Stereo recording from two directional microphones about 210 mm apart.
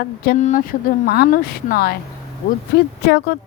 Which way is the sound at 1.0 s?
45° left (ahead or behind).